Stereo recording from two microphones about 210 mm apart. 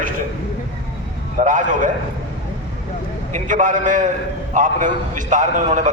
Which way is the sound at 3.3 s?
40° right (ahead or behind).